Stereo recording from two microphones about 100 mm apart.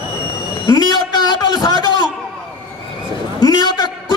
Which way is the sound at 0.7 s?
45° left (ahead or behind).